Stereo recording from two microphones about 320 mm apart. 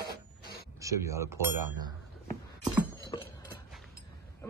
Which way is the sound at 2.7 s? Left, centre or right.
Centre.